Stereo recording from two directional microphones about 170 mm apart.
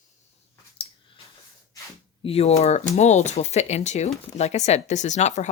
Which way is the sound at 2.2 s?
35° left (ahead or behind).